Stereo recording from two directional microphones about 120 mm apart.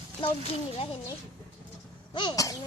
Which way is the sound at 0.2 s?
50° left (ahead or behind).